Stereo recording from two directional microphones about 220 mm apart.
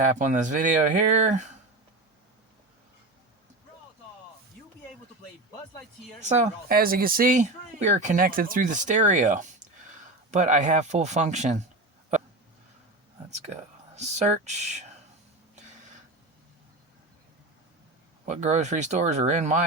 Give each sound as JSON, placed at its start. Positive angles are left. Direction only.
{"t": 0.0, "sound": "speech", "side_deg": -35}
{"t": 6.2, "sound": "speech", "side_deg": -30}
{"t": 13.9, "sound": "speech", "side_deg": -30}
{"t": 18.3, "sound": "speech", "side_deg": -30}